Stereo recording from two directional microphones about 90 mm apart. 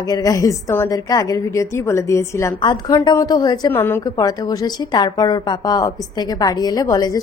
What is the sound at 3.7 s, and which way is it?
Speech, 25° left (ahead or behind).